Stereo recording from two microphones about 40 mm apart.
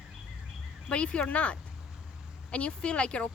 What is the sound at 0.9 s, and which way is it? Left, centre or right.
Speech, left.